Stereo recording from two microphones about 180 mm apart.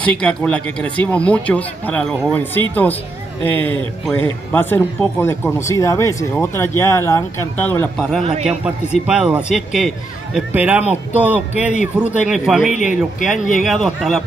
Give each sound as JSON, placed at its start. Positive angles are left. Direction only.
{"t": 0.0, "sound": "speech", "side_deg": 5}
{"t": 4.1, "sound": "speech", "side_deg": 10}
{"t": 8.2, "sound": "a man's voice", "side_deg": -35}
{"t": 8.5, "sound": "a man's voice", "side_deg": -5}